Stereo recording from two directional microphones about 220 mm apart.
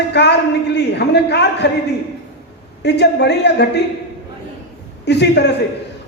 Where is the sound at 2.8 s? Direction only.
50° left (ahead or behind).